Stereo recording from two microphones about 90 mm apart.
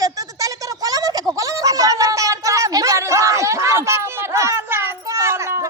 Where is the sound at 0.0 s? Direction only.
40° right (ahead or behind).